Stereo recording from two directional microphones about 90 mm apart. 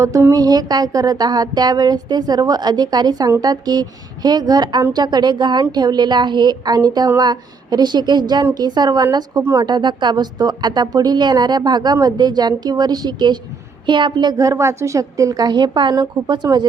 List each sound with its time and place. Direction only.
0.0 s music: 35° right (ahead or behind)
9.4 s speech: 30° right (ahead or behind)
9.6 s music: 55° right (ahead or behind)
13.8 s a woman's voice: 60° right (ahead or behind)
14.3 s music: 35° right (ahead or behind)